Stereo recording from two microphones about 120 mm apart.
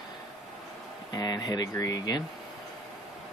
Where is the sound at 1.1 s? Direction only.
35° left (ahead or behind).